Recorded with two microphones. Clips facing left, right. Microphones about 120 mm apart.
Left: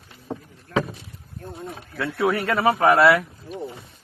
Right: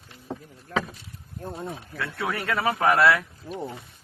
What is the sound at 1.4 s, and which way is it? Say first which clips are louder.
Speech: right 2 dB; 30° right (ahead or behind).